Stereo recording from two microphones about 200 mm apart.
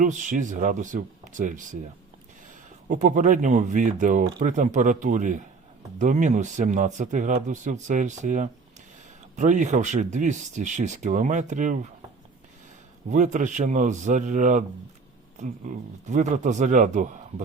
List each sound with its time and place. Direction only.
0.0 s speech: 40° right (ahead or behind)
2.9 s speech: 40° right (ahead or behind)
13.1 s speech: 40° right (ahead or behind)